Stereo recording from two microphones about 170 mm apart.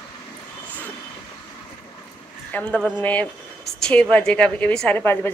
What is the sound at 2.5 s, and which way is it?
A woman's voice, 5° left (ahead or behind).